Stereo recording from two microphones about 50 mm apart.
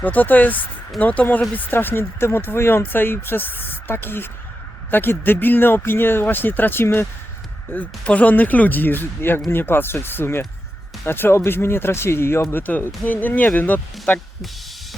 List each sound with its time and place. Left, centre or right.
0.0 s speech: left
1.7 s speech: left
8.0 s speech: left
13.1 s speech: left